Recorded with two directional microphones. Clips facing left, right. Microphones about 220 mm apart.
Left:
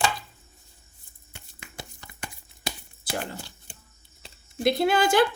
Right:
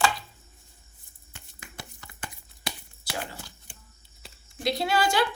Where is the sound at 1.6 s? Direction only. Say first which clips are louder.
Left 2 dB; 25° left (ahead or behind).